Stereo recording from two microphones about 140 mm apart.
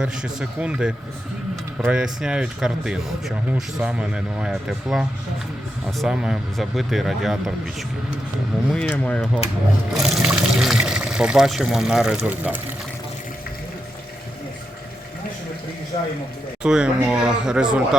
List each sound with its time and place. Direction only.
0.0 s speech: 5° right (ahead or behind)
8.7 s speech: 10° left (ahead or behind)
9.9 s speech: 5° right (ahead or behind)
15.9 s speech: 45° left (ahead or behind)
16.6 s speech: 5° right (ahead or behind)